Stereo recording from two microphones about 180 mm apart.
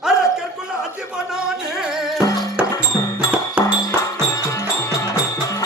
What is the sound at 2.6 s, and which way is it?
Music, 10° right (ahead or behind).